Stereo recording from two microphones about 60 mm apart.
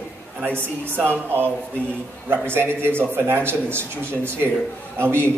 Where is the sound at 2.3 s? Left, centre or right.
Right.